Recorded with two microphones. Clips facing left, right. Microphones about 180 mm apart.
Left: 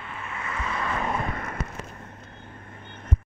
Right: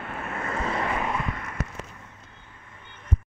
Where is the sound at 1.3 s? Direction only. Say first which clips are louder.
Left 4 dB; 45° left (ahead or behind).